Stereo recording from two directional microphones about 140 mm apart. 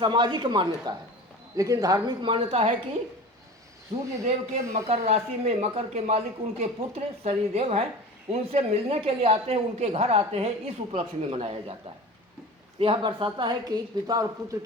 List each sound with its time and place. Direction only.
0.0 s a woman's voice: 35° right (ahead or behind)
4.2 s speech: 50° right (ahead or behind)
12.8 s a woman's voice: 35° right (ahead or behind)